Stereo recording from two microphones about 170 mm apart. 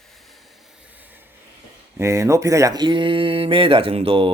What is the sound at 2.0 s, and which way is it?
Speech, 15° right (ahead or behind).